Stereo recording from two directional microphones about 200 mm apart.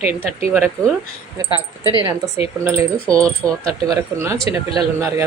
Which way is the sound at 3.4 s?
10° left (ahead or behind).